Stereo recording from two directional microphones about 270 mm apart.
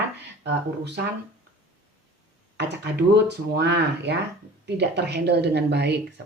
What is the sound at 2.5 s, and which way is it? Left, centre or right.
Speech, right.